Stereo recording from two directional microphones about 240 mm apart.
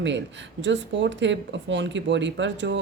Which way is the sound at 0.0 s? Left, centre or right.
Right.